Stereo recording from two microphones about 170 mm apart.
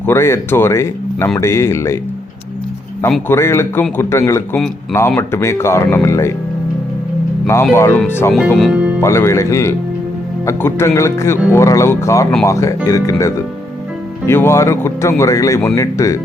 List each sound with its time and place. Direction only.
0.0 s speech: 15° left (ahead or behind)
3.2 s speech: 15° left (ahead or behind)
4.5 s speech: 5° left (ahead or behind)
7.4 s speech: 15° left (ahead or behind)
8.5 s speech: 5° right (ahead or behind)
9.0 s speech: 15° left (ahead or behind)